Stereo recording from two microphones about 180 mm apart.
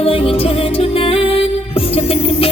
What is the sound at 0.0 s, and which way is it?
Music, 30° left (ahead or behind).